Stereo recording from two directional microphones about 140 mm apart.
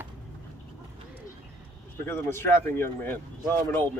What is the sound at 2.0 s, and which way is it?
Speech, 15° left (ahead or behind).